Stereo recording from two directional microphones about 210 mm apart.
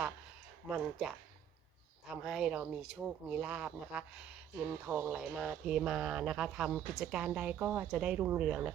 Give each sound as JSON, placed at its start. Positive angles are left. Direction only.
{"t": 0.7, "sound": "speech", "side_deg": 0}